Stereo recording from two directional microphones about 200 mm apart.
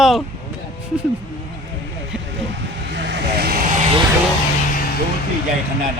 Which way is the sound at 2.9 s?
65° right (ahead or behind).